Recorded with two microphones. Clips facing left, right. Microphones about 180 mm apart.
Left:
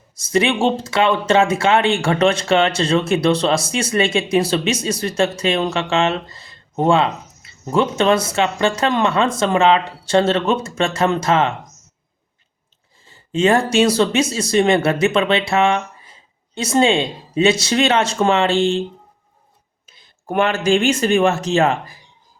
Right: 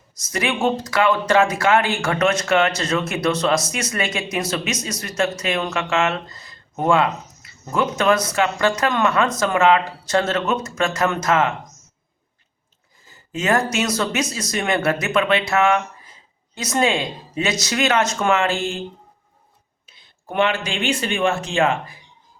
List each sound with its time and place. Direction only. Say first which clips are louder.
0.1 s speech: left 6 dB; 30° left (ahead or behind)
13.1 s speech: left 5 dB; 30° left (ahead or behind)
20.2 s speech: left 4 dB; 45° left (ahead or behind)